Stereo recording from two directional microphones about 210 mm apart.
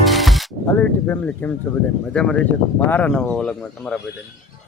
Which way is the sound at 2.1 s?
5° left (ahead or behind).